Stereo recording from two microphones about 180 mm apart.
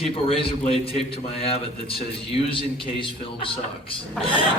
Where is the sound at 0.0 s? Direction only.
30° left (ahead or behind).